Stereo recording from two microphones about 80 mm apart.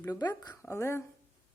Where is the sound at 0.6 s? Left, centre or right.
Left.